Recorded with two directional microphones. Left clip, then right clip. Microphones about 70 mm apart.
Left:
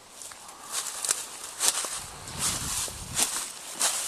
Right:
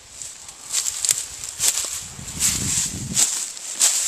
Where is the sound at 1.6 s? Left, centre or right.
Centre.